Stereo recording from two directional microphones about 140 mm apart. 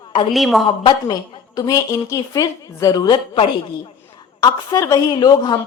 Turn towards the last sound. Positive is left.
turn(degrees=25)  # may be behind; listen again after turning